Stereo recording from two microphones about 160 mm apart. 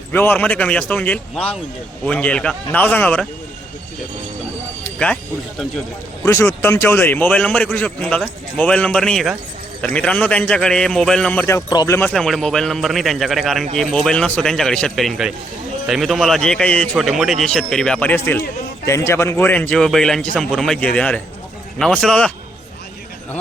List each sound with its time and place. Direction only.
0.1 s a man's voice: 10° left (ahead or behind)
4.8 s speech: 5° left (ahead or behind)
6.2 s a man's voice: 15° left (ahead or behind)
11.4 s a man's voice: 20° left (ahead or behind)
11.9 s a man's voice: 5° left (ahead or behind)